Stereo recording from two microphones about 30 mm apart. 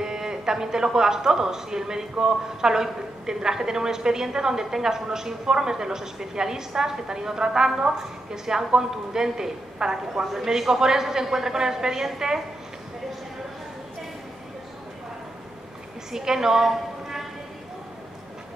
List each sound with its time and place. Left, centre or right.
0.0 s a woman's voice: right
10.3 s a woman's voice: centre
16.1 s a woman's voice: centre